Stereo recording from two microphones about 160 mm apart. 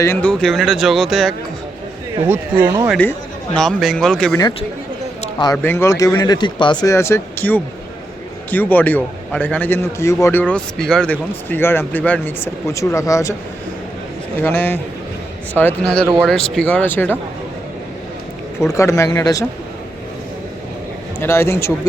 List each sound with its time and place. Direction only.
0.0 s a man's voice: 10° left (ahead or behind)
2.2 s speech: 10° right (ahead or behind)
3.0 s a man's voice: 5° left (ahead or behind)
5.6 s a man's voice: 15° left (ahead or behind)
14.4 s a man's voice: 15° left (ahead or behind)
18.6 s speech: 20° left (ahead or behind)
21.2 s a man's voice: 15° left (ahead or behind)